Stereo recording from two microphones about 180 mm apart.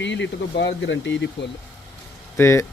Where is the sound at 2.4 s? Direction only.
15° left (ahead or behind).